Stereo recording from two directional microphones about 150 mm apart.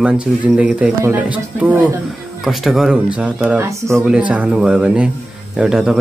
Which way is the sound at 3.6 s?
20° right (ahead or behind).